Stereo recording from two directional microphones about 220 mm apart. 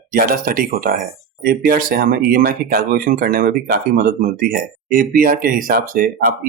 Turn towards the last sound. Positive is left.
turn(degrees=-40)  # may be behind; listen again after turning